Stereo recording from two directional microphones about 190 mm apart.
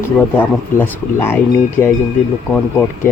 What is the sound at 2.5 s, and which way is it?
Speech, 5° left (ahead or behind).